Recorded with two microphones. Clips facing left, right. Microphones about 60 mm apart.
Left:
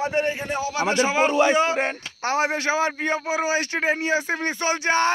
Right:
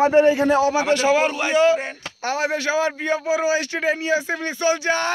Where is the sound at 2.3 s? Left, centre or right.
Left.